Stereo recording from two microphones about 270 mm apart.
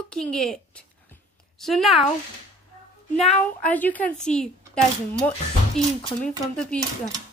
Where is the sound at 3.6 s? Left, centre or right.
Centre.